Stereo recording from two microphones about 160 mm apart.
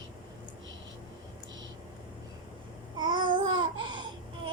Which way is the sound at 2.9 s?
30° right (ahead or behind).